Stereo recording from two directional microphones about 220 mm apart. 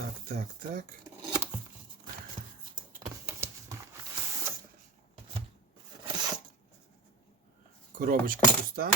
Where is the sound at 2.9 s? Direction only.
15° right (ahead or behind).